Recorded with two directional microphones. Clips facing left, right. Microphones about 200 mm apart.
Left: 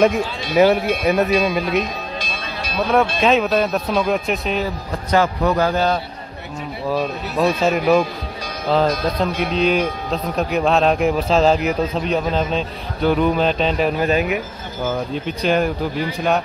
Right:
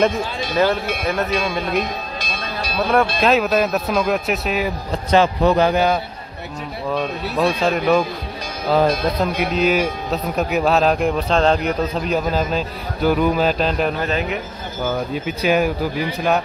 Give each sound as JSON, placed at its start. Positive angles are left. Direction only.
{"t": 0.6, "sound": "speech", "side_deg": 15}
{"t": 2.1, "sound": "music", "side_deg": -40}
{"t": 2.9, "sound": "a man's voice", "side_deg": 0}
{"t": 5.1, "sound": "a man's voice", "side_deg": -25}
{"t": 6.9, "sound": "a man's voice", "side_deg": 5}
{"t": 8.6, "sound": "a man's voice", "side_deg": -10}
{"t": 14.0, "sound": "speech", "side_deg": 10}
{"t": 15.1, "sound": "a man's voice", "side_deg": -5}